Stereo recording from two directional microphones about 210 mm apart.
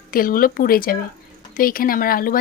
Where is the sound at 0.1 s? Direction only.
40° left (ahead or behind).